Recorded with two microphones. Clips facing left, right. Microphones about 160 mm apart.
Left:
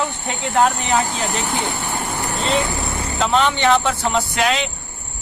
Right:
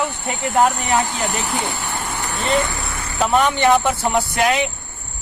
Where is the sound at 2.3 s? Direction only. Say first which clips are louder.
Right 1 dB; 25° left (ahead or behind).